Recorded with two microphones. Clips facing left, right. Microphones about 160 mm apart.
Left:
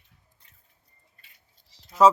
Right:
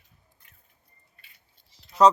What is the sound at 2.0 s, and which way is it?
Speech, 5° left (ahead or behind).